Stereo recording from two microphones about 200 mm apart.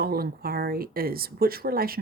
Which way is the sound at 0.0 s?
50° right (ahead or behind).